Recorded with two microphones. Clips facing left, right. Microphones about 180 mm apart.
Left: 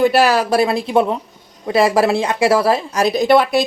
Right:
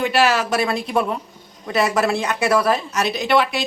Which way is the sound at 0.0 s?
40° left (ahead or behind).